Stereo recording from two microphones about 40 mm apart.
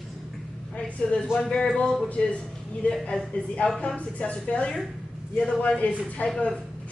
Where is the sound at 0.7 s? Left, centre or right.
Left.